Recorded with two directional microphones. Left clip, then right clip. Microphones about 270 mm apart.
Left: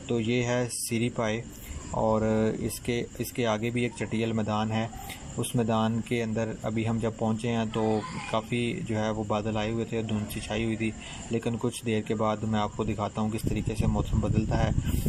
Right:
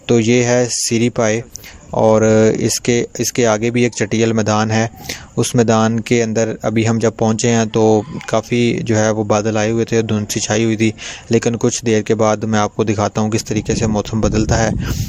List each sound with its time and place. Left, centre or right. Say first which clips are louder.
0.1 s speech: right 15 dB; right
0.9 s speech: right 14 dB; right
1.1 s speech: right 14 dB; right
2.8 s speech: right 15 dB; right
4.2 s speech: right 14 dB; right
8.4 s speech: right 15 dB; right
8.9 s speech: right 14 dB; right
11.3 s speech: right 15 dB; right
11.9 s speech: right 15 dB; right
12.1 s speech: right 12 dB; right
13.5 s speech: right 15 dB; right
13.8 s speech: right 14 dB; right